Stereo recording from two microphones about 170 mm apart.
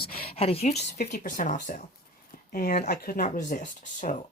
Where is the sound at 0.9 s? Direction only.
55° left (ahead or behind).